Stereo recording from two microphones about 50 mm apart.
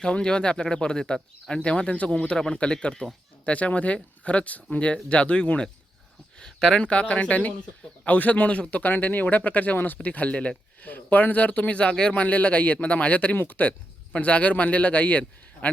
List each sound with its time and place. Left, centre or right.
0.0 s speech: centre
3.4 s speech: left
6.8 s speech: left
13.3 s speech: left